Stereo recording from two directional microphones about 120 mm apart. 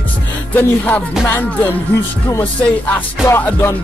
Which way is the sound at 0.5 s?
15° left (ahead or behind).